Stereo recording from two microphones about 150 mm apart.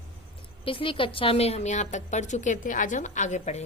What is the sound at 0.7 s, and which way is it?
A woman's voice, 35° left (ahead or behind).